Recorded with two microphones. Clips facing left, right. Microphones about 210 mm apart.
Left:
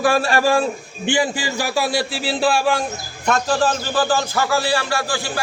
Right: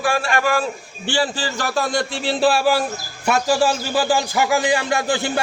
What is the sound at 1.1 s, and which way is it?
A man's voice, 15° left (ahead or behind).